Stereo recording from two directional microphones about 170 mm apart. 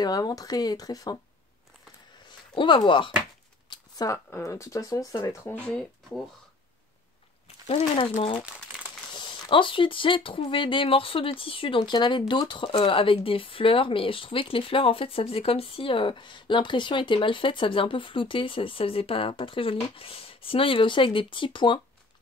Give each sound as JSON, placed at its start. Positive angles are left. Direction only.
{"t": 0.0, "sound": "speech", "side_deg": 20}
{"t": 2.5, "sound": "speech", "side_deg": 30}
{"t": 7.6, "sound": "speech", "side_deg": 35}